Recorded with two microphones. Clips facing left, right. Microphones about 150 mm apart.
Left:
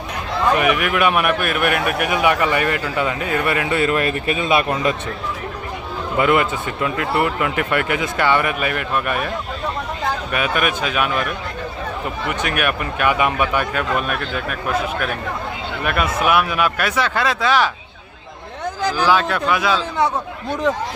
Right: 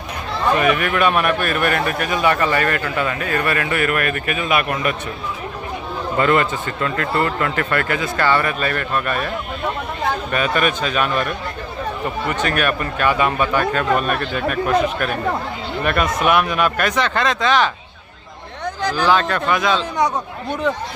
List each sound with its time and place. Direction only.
0.5 s speech: 10° left (ahead or behind)
6.1 s speech: 10° left (ahead or behind)
10.3 s speech: 10° left (ahead or behind)
18.9 s speech: 10° left (ahead or behind)